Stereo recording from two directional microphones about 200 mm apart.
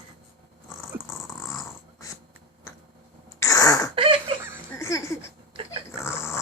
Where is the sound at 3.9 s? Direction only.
25° right (ahead or behind).